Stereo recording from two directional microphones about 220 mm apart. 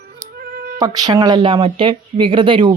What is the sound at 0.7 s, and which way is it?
Speech, 15° right (ahead or behind).